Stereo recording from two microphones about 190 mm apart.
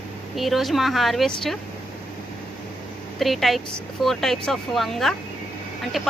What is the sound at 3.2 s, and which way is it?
Speech, centre (ahead or behind).